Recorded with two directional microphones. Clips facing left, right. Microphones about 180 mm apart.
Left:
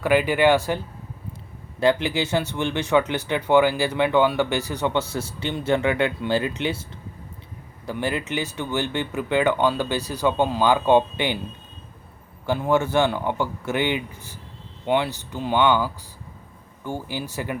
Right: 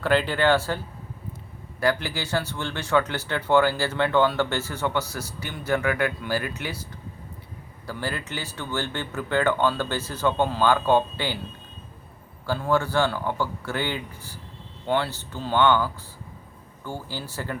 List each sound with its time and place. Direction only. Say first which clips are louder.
0.0 s speech: left 3 dB; 10° left (ahead or behind)
1.8 s speech: left 5 dB; 20° left (ahead or behind)
7.9 s speech: left 5 dB; 20° left (ahead or behind)
12.5 s speech: left 3 dB; 20° left (ahead or behind)